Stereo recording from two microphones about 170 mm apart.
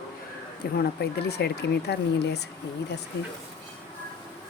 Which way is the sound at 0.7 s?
70° left (ahead or behind).